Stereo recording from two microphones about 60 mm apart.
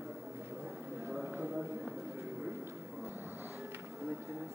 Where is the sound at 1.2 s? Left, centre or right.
Right.